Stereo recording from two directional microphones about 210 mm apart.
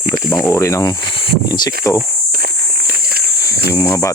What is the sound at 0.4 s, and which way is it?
Speech, 15° left (ahead or behind).